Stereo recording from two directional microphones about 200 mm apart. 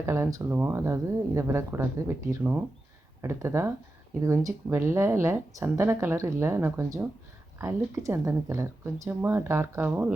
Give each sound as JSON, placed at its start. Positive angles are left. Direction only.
{"t": 0.0, "sound": "speech", "side_deg": -15}